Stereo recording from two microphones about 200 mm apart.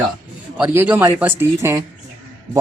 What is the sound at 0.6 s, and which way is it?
A man's voice, 10° right (ahead or behind).